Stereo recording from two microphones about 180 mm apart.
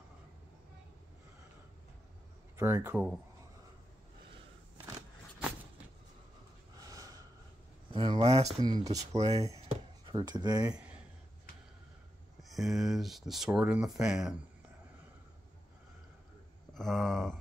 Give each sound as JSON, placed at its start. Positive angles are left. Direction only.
{"t": 2.5, "sound": "speech", "side_deg": -15}
{"t": 6.9, "sound": "snort", "side_deg": -20}
{"t": 7.9, "sound": "speech", "side_deg": -25}
{"t": 8.6, "sound": "speech", "side_deg": -20}
{"t": 9.0, "sound": "speech", "side_deg": -35}
{"t": 10.0, "sound": "speech", "side_deg": -25}
{"t": 10.7, "sound": "a sound", "side_deg": -10}
{"t": 12.4, "sound": "speech", "side_deg": 0}
{"t": 16.7, "sound": "speech", "side_deg": 0}